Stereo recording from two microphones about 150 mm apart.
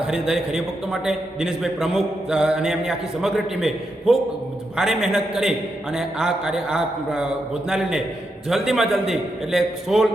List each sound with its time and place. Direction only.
0.1 s a man's voice: 5° right (ahead or behind)